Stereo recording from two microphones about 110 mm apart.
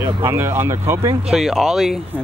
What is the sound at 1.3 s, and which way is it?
Speech, 5° right (ahead or behind).